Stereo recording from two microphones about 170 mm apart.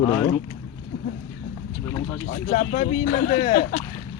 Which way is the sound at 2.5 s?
50° left (ahead or behind).